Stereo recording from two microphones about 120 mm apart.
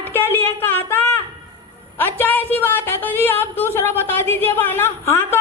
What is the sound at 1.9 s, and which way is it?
A woman's voice, 15° left (ahead or behind).